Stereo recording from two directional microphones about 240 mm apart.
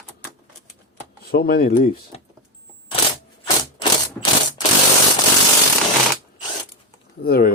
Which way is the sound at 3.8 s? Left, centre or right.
Centre.